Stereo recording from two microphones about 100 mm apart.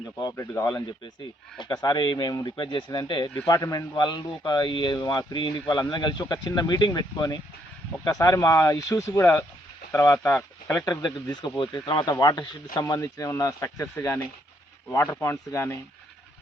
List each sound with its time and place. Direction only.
1.5 s speech: 50° left (ahead or behind)
3.9 s speech: 45° left (ahead or behind)
12.8 s speech: 35° left (ahead or behind)